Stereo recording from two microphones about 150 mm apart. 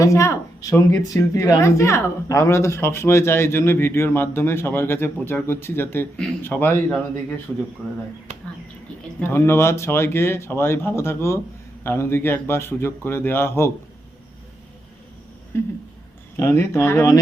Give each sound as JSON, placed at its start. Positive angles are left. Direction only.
{"t": 0.0, "sound": "a woman's voice", "side_deg": 20}
{"t": 9.2, "sound": "a woman's voice", "side_deg": 15}
{"t": 15.5, "sound": "a woman's voice", "side_deg": 15}